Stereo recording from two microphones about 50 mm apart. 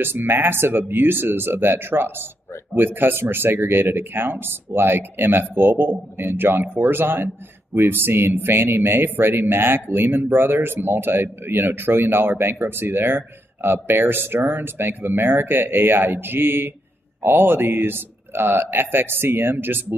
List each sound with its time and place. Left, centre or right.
0.0 s speech: right